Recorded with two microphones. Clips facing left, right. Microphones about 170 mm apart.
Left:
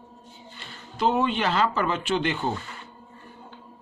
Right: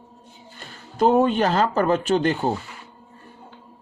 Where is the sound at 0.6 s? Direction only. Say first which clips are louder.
Right 5 dB; 45° right (ahead or behind).